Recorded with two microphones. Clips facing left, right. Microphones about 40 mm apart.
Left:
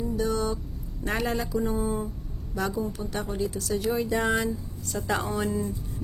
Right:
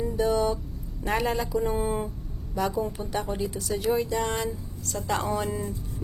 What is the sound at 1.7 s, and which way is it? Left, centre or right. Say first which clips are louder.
Speech: right 1 dB; right.